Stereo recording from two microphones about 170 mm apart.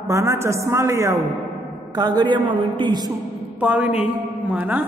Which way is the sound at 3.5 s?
10° right (ahead or behind).